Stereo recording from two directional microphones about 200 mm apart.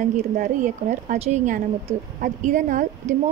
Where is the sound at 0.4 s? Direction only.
40° right (ahead or behind).